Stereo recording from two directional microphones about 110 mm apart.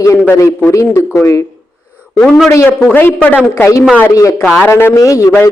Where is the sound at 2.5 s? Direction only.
25° left (ahead or behind).